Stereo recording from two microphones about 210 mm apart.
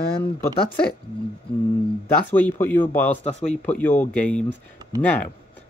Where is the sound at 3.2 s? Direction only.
30° left (ahead or behind).